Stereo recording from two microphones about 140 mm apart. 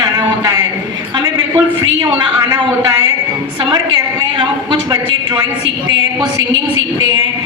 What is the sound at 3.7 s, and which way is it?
A woman's voice, 30° right (ahead or behind).